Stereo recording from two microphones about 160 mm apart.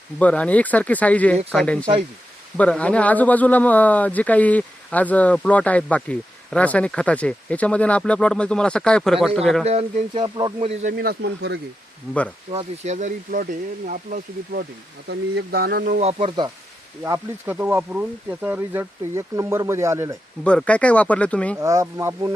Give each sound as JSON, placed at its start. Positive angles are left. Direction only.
{"t": 0.2, "sound": "a man's voice", "side_deg": 10}
{"t": 9.6, "sound": "speech", "side_deg": -40}
{"t": 10.2, "sound": "speech", "side_deg": -25}
{"t": 10.9, "sound": "speech", "side_deg": -80}
{"t": 12.5, "sound": "speech", "side_deg": -45}
{"t": 15.1, "sound": "speech", "side_deg": -80}
{"t": 16.0, "sound": "speech", "side_deg": -40}
{"t": 17.0, "sound": "speech", "side_deg": -15}
{"t": 20.4, "sound": "a man's voice", "side_deg": 5}
{"t": 21.6, "sound": "speech", "side_deg": -20}